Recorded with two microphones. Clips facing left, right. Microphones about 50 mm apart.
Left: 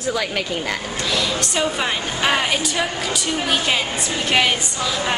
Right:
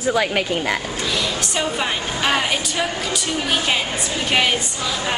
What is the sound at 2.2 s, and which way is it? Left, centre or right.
Speech, centre.